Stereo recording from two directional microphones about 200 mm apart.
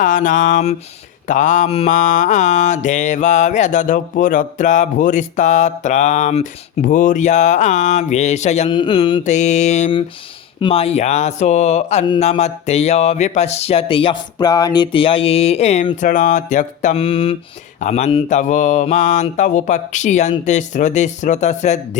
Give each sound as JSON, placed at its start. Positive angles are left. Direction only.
{"t": 0.0, "sound": "mantra", "side_deg": 40}